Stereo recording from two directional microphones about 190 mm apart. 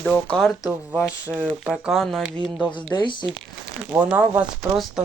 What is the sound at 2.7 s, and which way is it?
Speech, 25° left (ahead or behind).